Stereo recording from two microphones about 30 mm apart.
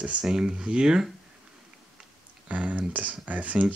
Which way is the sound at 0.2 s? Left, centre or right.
Right.